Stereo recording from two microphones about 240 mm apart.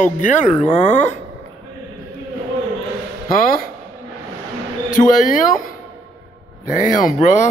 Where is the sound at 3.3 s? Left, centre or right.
Left.